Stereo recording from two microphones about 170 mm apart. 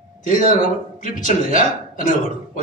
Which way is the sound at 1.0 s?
50° left (ahead or behind).